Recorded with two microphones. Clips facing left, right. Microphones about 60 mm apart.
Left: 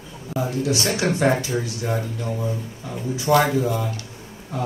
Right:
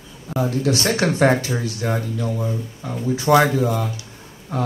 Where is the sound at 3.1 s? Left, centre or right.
Right.